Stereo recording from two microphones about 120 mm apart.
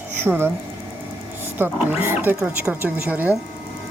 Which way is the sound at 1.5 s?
15° right (ahead or behind).